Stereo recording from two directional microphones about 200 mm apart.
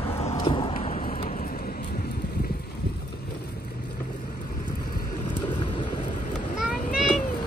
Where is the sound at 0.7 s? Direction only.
35° left (ahead or behind).